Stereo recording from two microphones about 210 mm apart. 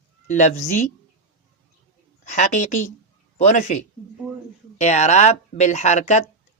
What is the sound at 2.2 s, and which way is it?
Speech, 35° left (ahead or behind).